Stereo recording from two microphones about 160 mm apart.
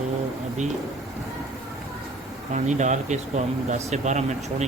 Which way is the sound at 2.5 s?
50° right (ahead or behind).